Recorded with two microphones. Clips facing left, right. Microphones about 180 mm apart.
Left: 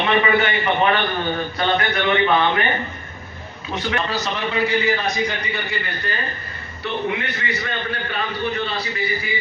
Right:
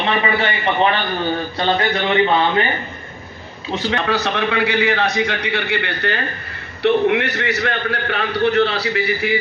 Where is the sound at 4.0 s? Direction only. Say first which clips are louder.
Right 6 dB; 60° right (ahead or behind).